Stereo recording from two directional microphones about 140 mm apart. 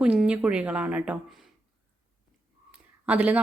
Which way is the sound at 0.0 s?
5° right (ahead or behind).